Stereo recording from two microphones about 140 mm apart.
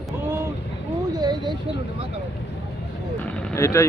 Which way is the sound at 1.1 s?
30° right (ahead or behind).